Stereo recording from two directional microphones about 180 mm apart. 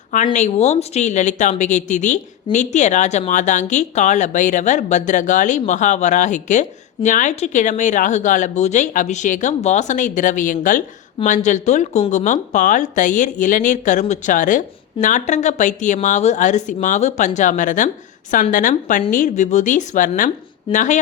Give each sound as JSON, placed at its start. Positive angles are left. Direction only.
{"t": 0.3, "sound": "speech", "side_deg": 40}